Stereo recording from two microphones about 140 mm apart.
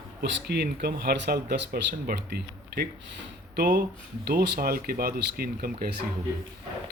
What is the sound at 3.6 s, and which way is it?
Speech, 90° right.